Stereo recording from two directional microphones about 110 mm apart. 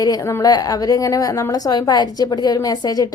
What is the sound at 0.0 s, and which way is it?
A woman's voice, 30° left (ahead or behind).